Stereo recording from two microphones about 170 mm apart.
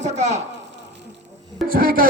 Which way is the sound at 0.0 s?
40° right (ahead or behind).